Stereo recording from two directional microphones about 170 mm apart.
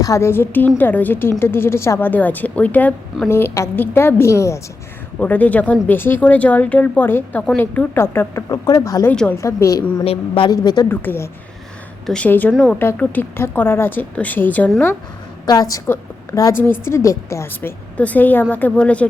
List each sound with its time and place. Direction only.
0.0 s speech: 15° left (ahead or behind)
10.0 s speech: 30° left (ahead or behind)
10.8 s speech: 10° left (ahead or behind)
15.4 s speech: 20° left (ahead or behind)